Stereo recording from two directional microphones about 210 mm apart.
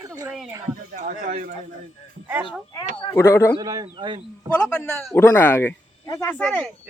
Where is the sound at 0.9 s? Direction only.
40° right (ahead or behind).